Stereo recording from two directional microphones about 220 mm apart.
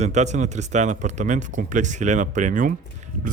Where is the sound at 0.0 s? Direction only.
30° right (ahead or behind).